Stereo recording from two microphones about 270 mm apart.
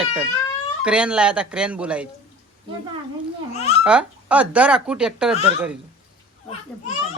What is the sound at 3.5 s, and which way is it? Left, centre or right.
Speech, left.